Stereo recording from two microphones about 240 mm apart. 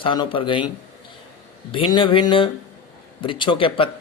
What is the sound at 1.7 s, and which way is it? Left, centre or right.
A man's voice, left.